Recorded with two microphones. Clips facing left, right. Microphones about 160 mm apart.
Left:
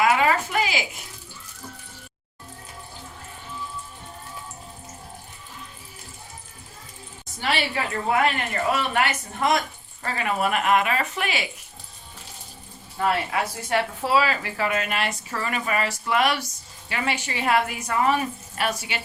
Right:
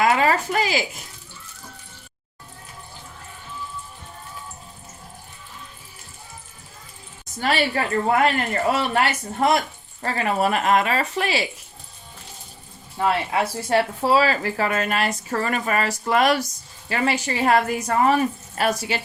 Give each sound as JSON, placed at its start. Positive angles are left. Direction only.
{"t": 0.0, "sound": "a sound", "side_deg": -35}
{"t": 7.3, "sound": "a woman's voice", "side_deg": -45}
{"t": 13.3, "sound": "speech", "side_deg": -35}